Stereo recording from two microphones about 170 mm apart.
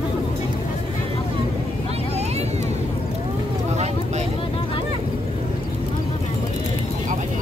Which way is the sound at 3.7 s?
40° right (ahead or behind).